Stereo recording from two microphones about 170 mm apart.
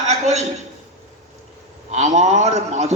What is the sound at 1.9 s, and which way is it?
A man's voice, 40° right (ahead or behind).